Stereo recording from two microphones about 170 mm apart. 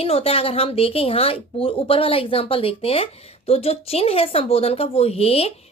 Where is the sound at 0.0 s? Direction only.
35° left (ahead or behind).